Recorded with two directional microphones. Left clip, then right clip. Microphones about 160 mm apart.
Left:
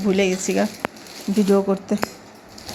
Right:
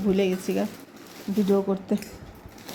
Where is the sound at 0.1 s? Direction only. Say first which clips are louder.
Left 5 dB; 10° right (ahead or behind).